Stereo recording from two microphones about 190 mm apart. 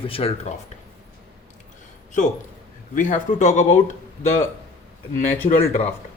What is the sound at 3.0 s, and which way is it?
Speech, 40° left (ahead or behind).